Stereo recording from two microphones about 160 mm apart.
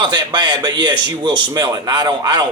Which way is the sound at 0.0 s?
25° right (ahead or behind).